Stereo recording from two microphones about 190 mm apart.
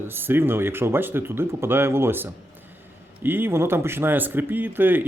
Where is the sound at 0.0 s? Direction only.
10° right (ahead or behind).